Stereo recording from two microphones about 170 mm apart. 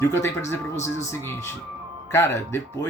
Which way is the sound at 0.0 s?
15° left (ahead or behind).